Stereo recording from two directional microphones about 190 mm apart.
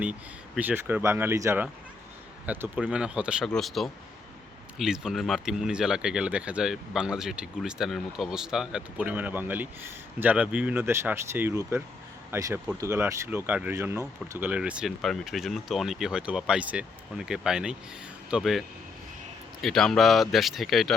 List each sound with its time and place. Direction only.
0.0 s speech: 5° right (ahead or behind)
19.6 s speech: centre (ahead or behind)